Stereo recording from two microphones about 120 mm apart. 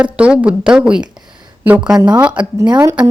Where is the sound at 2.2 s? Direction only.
10° right (ahead or behind).